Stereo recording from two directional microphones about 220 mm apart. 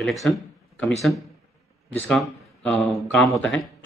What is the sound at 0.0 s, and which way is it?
Speech, centre (ahead or behind).